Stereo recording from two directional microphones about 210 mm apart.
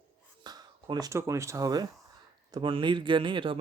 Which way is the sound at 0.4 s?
20° right (ahead or behind).